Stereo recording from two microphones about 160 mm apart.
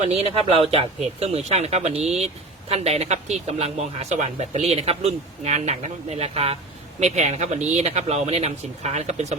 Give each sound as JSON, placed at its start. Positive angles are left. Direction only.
{"t": 0.0, "sound": "speech", "side_deg": -40}